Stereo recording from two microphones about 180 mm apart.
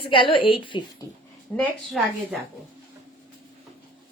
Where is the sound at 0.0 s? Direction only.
30° left (ahead or behind).